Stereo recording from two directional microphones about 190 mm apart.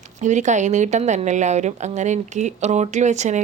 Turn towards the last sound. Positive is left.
turn(degrees=-40)  # may be behind; listen again after turning